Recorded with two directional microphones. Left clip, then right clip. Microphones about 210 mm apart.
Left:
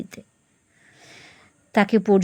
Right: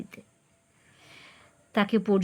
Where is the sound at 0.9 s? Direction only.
20° left (ahead or behind).